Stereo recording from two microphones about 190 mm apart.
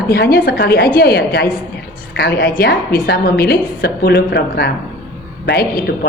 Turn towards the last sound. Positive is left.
turn(degrees=55)  # may be behind; listen again after turning